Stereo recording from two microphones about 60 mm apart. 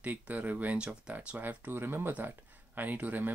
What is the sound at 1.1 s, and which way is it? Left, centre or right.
Speech, right.